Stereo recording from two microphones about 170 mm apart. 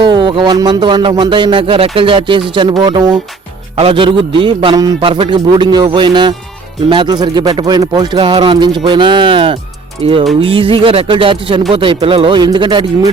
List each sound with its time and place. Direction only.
0.0 s speech: 25° right (ahead or behind)